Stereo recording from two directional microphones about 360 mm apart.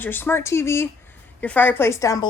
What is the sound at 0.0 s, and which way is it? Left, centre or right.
Speech, centre.